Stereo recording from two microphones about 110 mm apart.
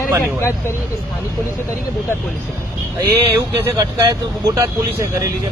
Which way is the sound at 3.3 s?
35° right (ahead or behind).